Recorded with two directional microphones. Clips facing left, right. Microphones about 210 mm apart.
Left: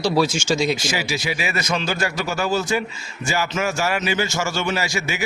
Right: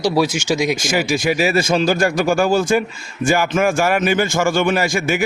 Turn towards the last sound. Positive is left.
turn(degrees=-50)  # may be behind; listen again after turning